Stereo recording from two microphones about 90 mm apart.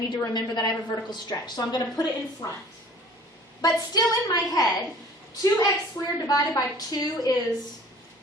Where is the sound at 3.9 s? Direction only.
45° left (ahead or behind).